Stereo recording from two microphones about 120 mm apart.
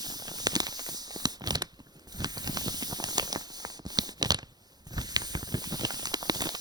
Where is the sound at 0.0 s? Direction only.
35° right (ahead or behind).